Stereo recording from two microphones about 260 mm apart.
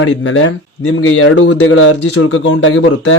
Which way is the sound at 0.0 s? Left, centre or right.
Left.